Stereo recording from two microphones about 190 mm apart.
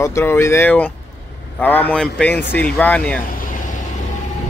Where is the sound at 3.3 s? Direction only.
45° left (ahead or behind).